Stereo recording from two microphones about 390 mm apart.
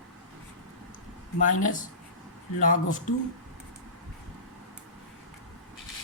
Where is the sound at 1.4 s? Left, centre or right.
Centre.